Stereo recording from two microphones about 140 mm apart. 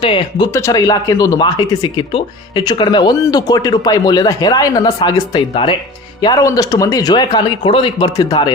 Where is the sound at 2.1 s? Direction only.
35° left (ahead or behind).